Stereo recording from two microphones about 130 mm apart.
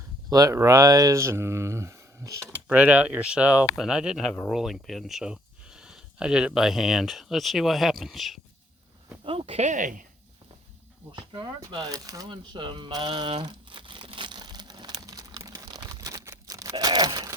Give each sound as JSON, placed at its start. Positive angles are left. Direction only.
{"t": 0.3, "sound": "speech", "side_deg": -25}
{"t": 2.6, "sound": "speech", "side_deg": -10}
{"t": 9.2, "sound": "speech", "side_deg": -45}
{"t": 11.1, "sound": "speech", "side_deg": -35}
{"t": 11.9, "sound": "a sound", "side_deg": -25}